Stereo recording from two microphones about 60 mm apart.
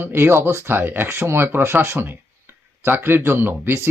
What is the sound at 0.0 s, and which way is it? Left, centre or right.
Speech, right.